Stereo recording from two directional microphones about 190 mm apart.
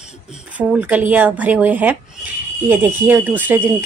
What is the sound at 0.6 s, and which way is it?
Speech, 10° right (ahead or behind).